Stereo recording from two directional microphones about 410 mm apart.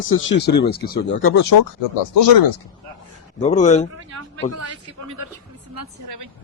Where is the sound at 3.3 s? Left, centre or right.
Centre.